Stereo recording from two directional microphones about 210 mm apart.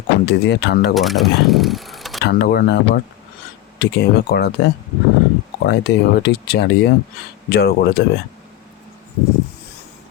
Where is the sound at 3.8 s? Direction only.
55° left (ahead or behind).